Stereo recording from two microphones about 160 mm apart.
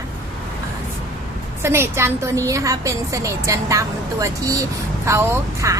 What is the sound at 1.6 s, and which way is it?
A woman's voice, 15° right (ahead or behind).